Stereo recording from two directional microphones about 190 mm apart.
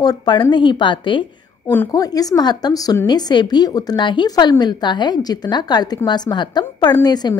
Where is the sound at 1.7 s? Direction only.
15° left (ahead or behind).